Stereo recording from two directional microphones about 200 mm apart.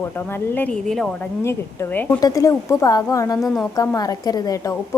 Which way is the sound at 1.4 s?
15° left (ahead or behind).